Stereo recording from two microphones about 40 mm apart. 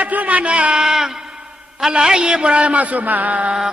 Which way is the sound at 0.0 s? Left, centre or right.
Right.